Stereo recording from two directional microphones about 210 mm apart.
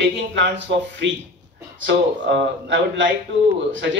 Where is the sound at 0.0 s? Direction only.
55° right (ahead or behind).